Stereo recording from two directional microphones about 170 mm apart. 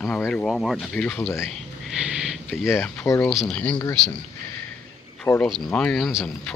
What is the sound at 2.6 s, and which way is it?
Speech, 15° left (ahead or behind).